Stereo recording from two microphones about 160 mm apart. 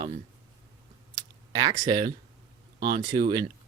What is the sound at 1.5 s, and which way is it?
Speech, 25° right (ahead or behind).